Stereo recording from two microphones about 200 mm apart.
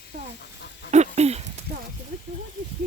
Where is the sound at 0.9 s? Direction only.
35° right (ahead or behind).